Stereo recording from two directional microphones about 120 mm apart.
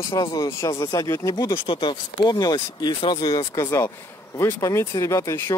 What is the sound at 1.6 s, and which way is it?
Speech, 40° left (ahead or behind).